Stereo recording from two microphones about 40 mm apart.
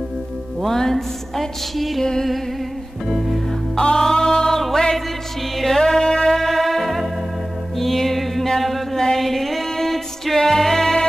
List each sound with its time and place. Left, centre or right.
0.6 s speech: centre
3.1 s music: centre
3.7 s music: centre
9.2 s a sound: centre
9.7 s music: centre